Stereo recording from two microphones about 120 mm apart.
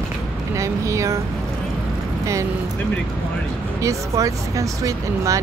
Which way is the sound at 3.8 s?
25° right (ahead or behind).